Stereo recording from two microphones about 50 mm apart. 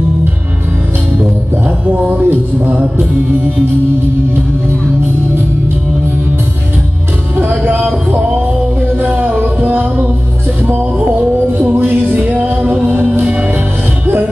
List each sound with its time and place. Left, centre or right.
1.9 s speech: right
7.3 s music: right
10.7 s music: right
13.2 s music: right